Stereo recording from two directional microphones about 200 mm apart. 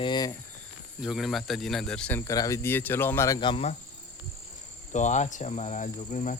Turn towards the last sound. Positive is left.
turn(degrees=40)  # may be behind; listen again after turning